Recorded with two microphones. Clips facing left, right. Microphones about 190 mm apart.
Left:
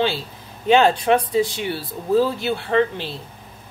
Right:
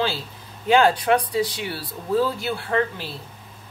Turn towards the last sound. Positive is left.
turn(degrees=25)  # may be behind; listen again after turning